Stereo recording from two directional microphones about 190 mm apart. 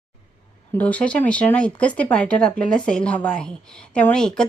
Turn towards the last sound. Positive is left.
turn(degrees=5)  # may be behind; listen again after turning